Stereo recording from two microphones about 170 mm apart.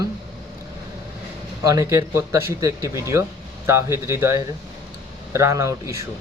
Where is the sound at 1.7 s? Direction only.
20° right (ahead or behind).